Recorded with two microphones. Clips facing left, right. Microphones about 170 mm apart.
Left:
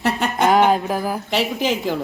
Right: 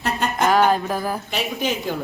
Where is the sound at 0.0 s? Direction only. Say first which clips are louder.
Left 3 dB; 70° left (ahead or behind).